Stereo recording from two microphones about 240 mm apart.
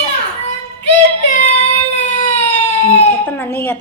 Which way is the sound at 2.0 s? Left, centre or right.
Left.